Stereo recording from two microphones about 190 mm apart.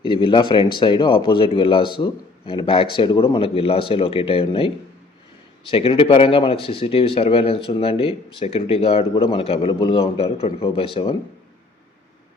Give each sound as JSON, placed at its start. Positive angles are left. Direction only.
{"t": 0.0, "sound": "speech", "side_deg": 25}